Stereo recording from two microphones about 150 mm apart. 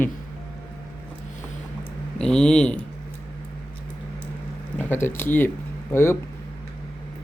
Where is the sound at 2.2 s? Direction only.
5° left (ahead or behind).